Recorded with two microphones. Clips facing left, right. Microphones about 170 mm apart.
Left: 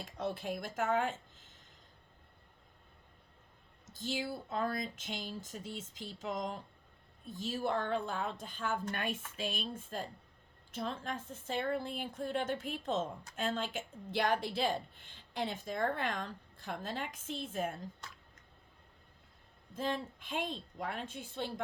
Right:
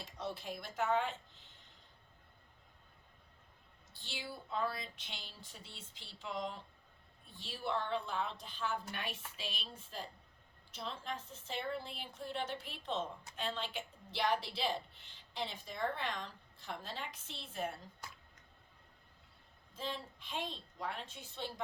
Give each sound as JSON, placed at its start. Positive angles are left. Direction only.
{"t": 0.0, "sound": "speech", "side_deg": 50}
{"t": 3.9, "sound": "a woman's voice", "side_deg": 45}
{"t": 19.7, "sound": "a woman's voice", "side_deg": 50}